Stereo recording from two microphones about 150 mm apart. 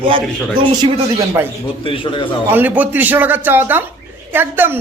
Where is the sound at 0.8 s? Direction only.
20° right (ahead or behind).